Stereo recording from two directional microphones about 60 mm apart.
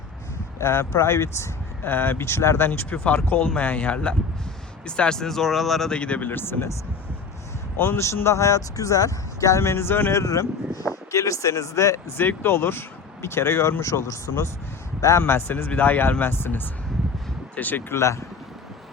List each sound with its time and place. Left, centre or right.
0.6 s speech: left
1.9 s speech: left
2.9 s speech: left; by 5.9 s centre
5.9 s speech: centre
6.2 s speech: left
7.8 s speech: left
9.6 s speech: left
10.1 s speech: left
12.4 s speech: left
15.2 s speech: left
17.9 s speech: left